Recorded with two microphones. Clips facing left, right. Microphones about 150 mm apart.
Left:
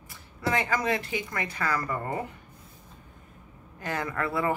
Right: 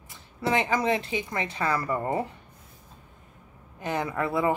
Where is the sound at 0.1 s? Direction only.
20° right (ahead or behind).